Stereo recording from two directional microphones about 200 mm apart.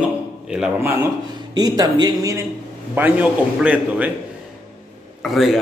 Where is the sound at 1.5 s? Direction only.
20° right (ahead or behind).